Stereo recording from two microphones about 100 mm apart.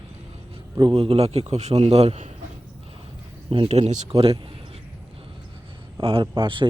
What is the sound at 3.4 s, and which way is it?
Speech, 65° right (ahead or behind).